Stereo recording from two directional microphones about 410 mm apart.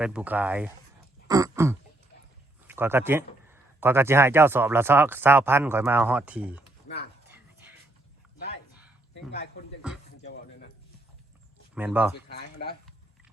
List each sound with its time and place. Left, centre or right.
0.0 s a man's voice: centre
1.3 s throat clearing: centre
2.6 s a man's voice: centre
6.8 s a sound: left
7.3 s music: centre
9.8 s a man's voice: centre
10.2 s a sound: left
11.7 s speech: centre
12.1 s speech: left